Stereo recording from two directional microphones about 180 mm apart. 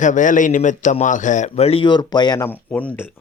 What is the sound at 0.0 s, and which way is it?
Speech, 45° left (ahead or behind).